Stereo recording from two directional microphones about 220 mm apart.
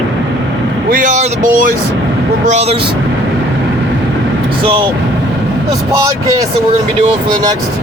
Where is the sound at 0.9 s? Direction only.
35° right (ahead or behind).